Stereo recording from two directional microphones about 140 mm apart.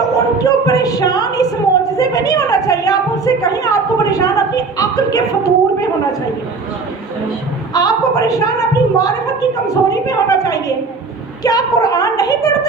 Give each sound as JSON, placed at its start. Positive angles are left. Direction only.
{"t": 0.3, "sound": "a woman's voice", "side_deg": 25}
{"t": 7.7, "sound": "a woman's voice", "side_deg": 25}